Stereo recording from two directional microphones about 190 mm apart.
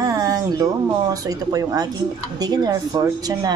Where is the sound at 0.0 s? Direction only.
20° right (ahead or behind).